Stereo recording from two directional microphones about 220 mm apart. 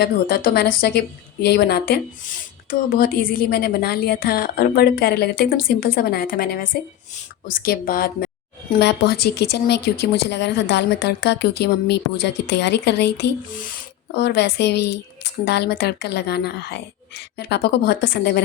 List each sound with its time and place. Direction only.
0.0 s speech: 45° left (ahead or behind)